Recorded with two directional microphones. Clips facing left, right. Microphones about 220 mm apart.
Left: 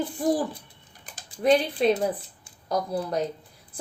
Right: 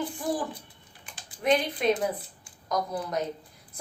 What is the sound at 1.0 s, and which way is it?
Typing, 40° left (ahead or behind).